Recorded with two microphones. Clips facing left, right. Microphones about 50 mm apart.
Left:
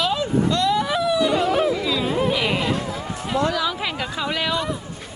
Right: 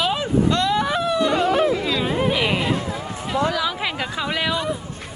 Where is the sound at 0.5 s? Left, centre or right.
Right.